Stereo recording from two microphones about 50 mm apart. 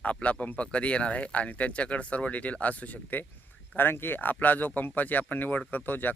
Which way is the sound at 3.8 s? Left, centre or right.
Left.